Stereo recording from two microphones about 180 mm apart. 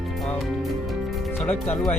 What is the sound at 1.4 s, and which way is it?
Speech, 10° left (ahead or behind).